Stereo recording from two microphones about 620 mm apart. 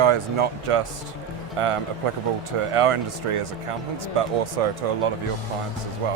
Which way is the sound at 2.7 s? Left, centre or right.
Right.